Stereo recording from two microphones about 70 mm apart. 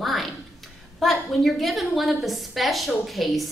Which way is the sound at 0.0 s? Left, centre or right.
Centre.